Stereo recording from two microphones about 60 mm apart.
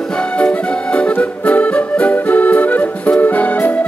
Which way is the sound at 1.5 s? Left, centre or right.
Left.